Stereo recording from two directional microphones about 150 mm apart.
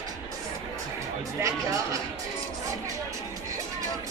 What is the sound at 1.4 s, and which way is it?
Chatter, 20° right (ahead or behind).